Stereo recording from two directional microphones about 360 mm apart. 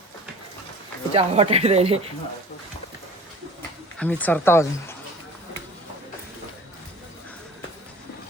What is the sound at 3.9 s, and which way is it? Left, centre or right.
Speech, centre.